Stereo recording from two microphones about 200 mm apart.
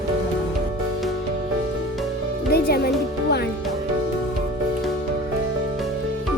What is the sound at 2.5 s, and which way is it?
Speech, 50° left (ahead or behind).